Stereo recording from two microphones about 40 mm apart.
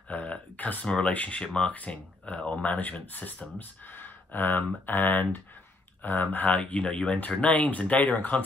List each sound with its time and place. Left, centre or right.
0.1 s a sound: left
0.8 s speech: left
2.6 s speech: left